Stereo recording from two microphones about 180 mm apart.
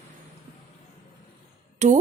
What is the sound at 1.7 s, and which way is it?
Speech, 40° right (ahead or behind).